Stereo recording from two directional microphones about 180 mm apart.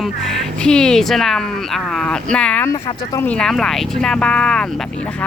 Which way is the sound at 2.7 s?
20° left (ahead or behind).